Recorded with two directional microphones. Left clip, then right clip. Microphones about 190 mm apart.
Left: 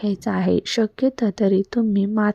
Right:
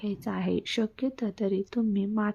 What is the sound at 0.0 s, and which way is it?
Speech, 35° left (ahead or behind).